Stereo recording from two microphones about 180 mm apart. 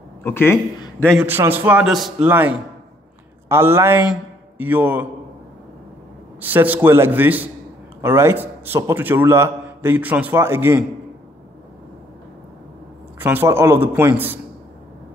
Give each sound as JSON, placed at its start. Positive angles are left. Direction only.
{"t": 0.2, "sound": "speech", "side_deg": 10}
{"t": 0.7, "sound": "a sound", "side_deg": 20}
{"t": 1.2, "sound": "a man's voice", "side_deg": -10}
{"t": 6.4, "sound": "a man's voice", "side_deg": -10}
{"t": 13.2, "sound": "a man's voice", "side_deg": -10}